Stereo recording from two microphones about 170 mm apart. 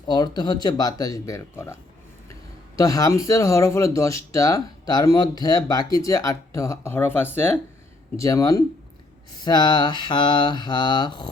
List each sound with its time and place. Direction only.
0.1 s speech: 25° left (ahead or behind)